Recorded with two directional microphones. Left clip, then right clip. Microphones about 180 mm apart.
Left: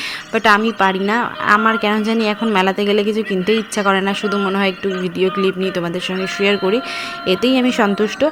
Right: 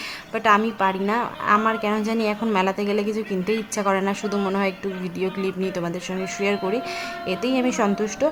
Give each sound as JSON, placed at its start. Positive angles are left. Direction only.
{"t": 0.3, "sound": "a woman's voice", "side_deg": 20}